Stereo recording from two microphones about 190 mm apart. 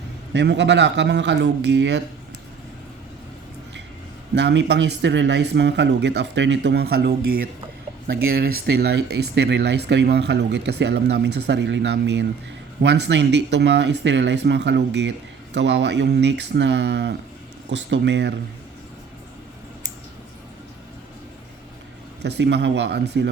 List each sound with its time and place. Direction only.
0.3 s speech: 65° right (ahead or behind)
4.4 s speech: 65° right (ahead or behind)
22.2 s speech: 65° right (ahead or behind)